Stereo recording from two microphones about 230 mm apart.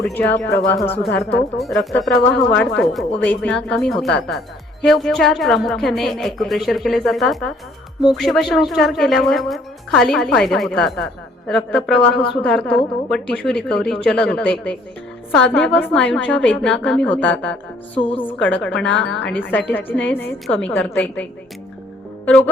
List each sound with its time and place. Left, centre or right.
0.0 s a woman's voice: centre
17.9 s a woman's voice: left
18.2 s a woman's voice: centre